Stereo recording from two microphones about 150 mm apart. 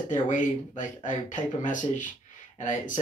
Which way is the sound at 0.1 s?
60° left (ahead or behind).